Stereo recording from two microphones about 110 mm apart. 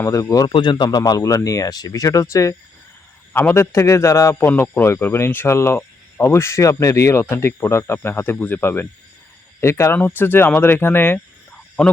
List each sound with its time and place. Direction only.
0.0 s speech: 30° left (ahead or behind)
0.4 s a man's voice: 45° left (ahead or behind); by 11.2 s 20° left (ahead or behind)